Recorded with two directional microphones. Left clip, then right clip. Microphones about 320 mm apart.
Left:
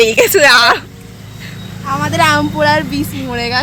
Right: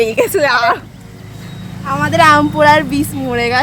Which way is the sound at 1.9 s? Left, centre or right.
Centre.